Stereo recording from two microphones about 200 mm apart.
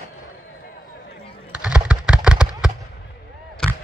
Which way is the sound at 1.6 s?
5° right (ahead or behind).